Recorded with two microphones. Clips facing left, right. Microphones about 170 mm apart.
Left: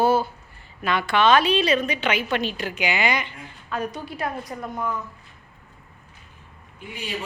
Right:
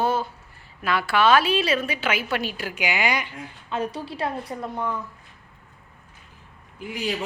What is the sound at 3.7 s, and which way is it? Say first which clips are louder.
A woman's voice: right 1 dB; 30° right (ahead or behind).